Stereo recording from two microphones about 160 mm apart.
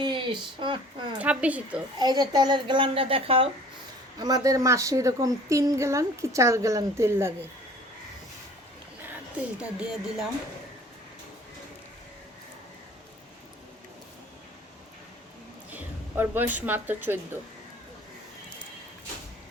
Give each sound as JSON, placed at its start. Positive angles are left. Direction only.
{"t": 0.0, "sound": "speech", "side_deg": -30}
{"t": 1.2, "sound": "a woman's voice", "side_deg": -10}
{"t": 2.0, "sound": "a woman's voice", "side_deg": -25}
{"t": 4.2, "sound": "a woman's voice", "side_deg": -20}
{"t": 9.0, "sound": "speech", "side_deg": -10}
{"t": 15.7, "sound": "speech", "side_deg": -10}